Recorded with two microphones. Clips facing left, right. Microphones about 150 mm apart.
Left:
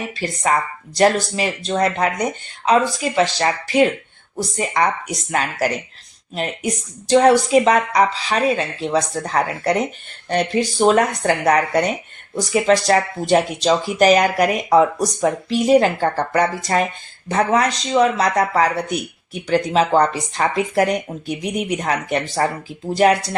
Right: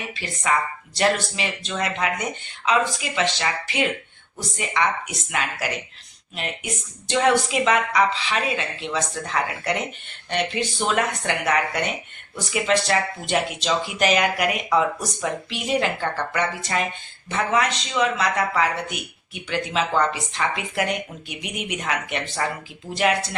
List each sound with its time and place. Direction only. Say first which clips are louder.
0.2 s speech: left 4 dB; 40° left (ahead or behind)